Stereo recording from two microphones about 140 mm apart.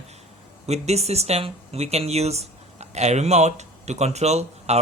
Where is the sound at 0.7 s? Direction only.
50° right (ahead or behind).